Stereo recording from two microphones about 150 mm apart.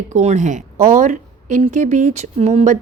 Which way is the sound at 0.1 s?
50° right (ahead or behind).